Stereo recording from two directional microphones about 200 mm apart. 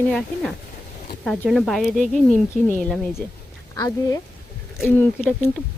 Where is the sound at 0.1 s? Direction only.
Centre (ahead or behind).